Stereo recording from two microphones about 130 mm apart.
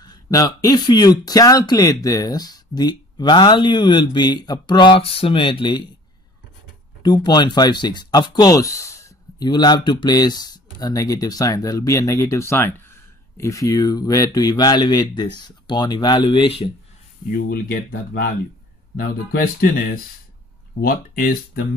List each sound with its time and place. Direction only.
0.0 s speech: 30° left (ahead or behind)
7.0 s speech: 30° left (ahead or behind)
17.3 s speech: 90° left